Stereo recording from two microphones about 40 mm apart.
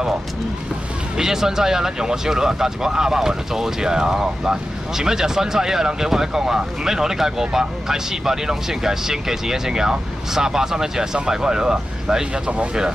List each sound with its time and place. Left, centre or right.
1.1 s speech: centre